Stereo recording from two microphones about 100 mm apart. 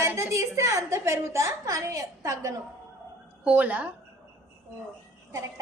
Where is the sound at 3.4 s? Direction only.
15° right (ahead or behind).